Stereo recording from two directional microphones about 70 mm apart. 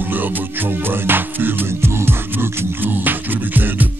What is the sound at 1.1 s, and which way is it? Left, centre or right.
Music, right.